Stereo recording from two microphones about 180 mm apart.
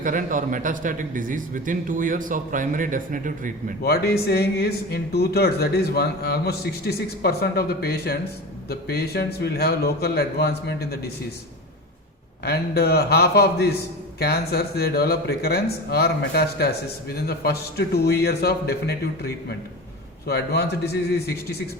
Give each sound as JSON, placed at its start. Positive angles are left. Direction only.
{"t": 0.0, "sound": "speech", "side_deg": -45}
{"t": 3.8, "sound": "speech", "side_deg": 60}
{"t": 12.5, "sound": "speech", "side_deg": 65}